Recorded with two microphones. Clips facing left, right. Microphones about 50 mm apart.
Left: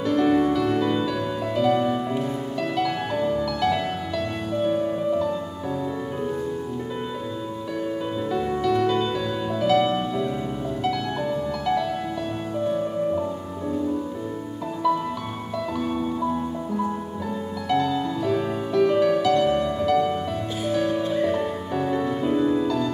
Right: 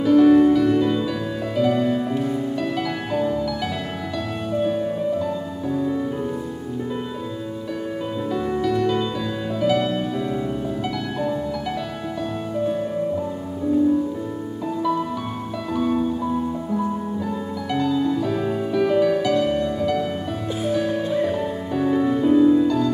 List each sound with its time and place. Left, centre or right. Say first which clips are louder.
0.0 s music: right 6 dB; centre
8.3 s music: right 1 dB; centre
15.7 s music: right 7 dB; centre
17.6 s music: right 2 dB; centre